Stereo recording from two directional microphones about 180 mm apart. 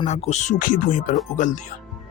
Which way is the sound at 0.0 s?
40° left (ahead or behind).